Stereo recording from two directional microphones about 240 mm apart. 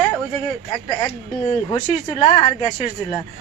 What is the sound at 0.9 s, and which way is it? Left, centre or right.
Speech, left.